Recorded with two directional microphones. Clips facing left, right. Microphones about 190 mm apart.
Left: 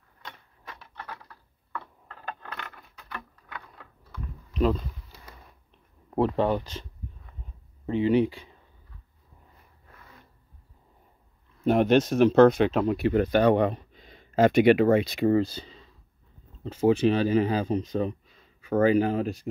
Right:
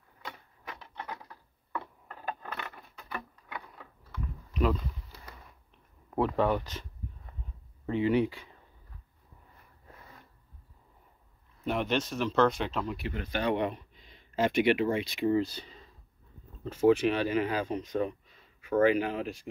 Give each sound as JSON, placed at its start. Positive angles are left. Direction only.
{"t": 0.7, "sound": "a sound", "side_deg": -20}
{"t": 4.6, "sound": "speech", "side_deg": 30}
{"t": 6.0, "sound": "speech", "side_deg": 30}
{"t": 11.6, "sound": "speech", "side_deg": 45}
{"t": 15.3, "sound": "speech", "side_deg": 30}